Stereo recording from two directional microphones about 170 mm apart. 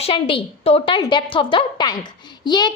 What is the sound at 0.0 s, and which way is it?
A woman's voice, 30° left (ahead or behind).